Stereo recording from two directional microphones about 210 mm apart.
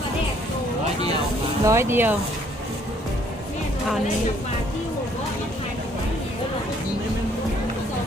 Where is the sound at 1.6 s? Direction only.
15° right (ahead or behind).